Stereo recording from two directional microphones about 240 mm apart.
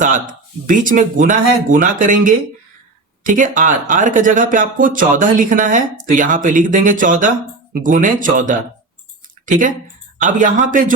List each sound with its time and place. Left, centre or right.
0.0 s speech: right